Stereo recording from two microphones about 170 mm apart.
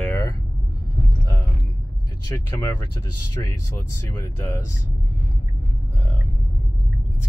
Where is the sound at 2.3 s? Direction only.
15° left (ahead or behind).